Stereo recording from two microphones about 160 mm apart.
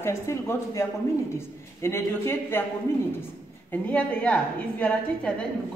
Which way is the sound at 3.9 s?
10° left (ahead or behind).